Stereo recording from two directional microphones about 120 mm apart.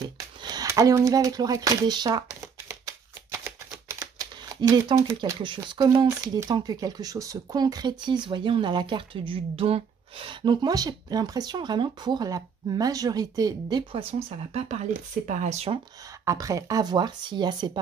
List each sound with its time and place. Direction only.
0.4 s a sound: 35° right (ahead or behind)
0.7 s speech: 25° right (ahead or behind)
3.3 s typewriter: 20° right (ahead or behind); by 4.9 s 35° right (ahead or behind)
4.9 s speech: 25° right (ahead or behind)
5.4 s speech: 40° right (ahead or behind)
14.5 s speech: 60° right (ahead or behind)
15.2 s speech: 85° right
16.3 s speech: 25° right (ahead or behind)